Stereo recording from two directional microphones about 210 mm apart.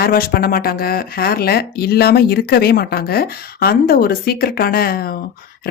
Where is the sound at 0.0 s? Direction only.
45° left (ahead or behind).